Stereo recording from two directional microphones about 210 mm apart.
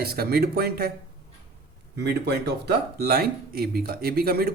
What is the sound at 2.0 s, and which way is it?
Speech, 55° right (ahead or behind).